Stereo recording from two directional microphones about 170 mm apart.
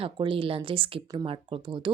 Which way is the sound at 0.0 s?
30° right (ahead or behind).